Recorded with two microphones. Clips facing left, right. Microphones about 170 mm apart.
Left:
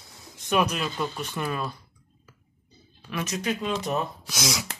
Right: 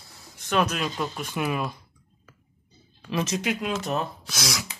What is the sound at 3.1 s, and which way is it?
Speech, 25° right (ahead or behind).